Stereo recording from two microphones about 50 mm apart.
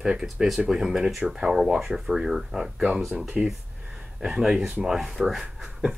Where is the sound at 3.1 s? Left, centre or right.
Centre.